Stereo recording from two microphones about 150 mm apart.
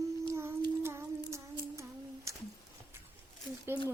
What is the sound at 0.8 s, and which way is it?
Humming, 15° right (ahead or behind).